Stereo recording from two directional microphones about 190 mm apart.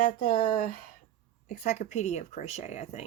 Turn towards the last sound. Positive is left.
turn(degrees=35)  # may be behind; listen again after turning